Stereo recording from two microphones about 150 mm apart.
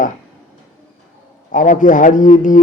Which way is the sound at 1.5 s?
60° left (ahead or behind).